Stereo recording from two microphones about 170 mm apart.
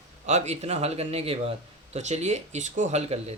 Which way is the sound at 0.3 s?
40° right (ahead or behind).